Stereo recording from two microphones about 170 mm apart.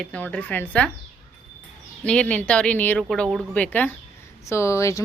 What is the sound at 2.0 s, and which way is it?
Speech, 5° left (ahead or behind).